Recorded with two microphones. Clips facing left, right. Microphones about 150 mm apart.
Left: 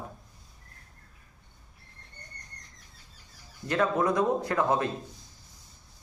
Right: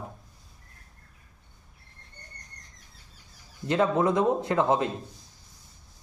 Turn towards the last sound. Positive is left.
turn(degrees=-20)  # may be behind; listen again after turning